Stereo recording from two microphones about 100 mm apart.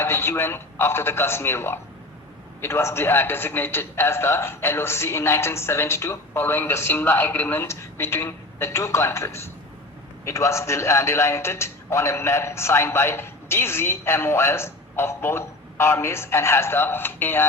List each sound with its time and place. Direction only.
0.0 s a man's voice: 25° left (ahead or behind)